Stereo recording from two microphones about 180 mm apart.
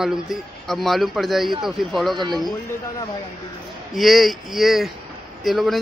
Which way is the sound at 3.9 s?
Centre (ahead or behind).